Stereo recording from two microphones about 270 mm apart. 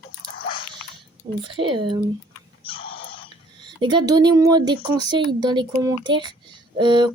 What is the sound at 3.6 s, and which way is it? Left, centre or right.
Speech, centre.